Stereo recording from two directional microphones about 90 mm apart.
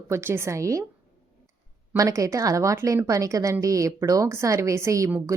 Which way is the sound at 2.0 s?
40° right (ahead or behind).